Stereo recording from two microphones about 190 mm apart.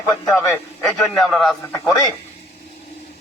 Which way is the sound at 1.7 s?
15° left (ahead or behind).